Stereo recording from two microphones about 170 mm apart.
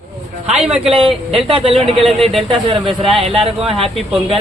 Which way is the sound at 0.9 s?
30° right (ahead or behind).